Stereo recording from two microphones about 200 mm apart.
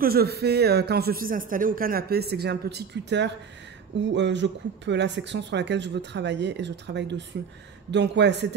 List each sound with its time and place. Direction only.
0.0 s speech: 50° right (ahead or behind)